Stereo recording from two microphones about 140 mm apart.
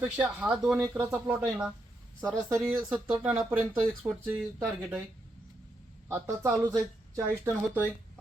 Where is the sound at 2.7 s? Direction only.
30° right (ahead or behind).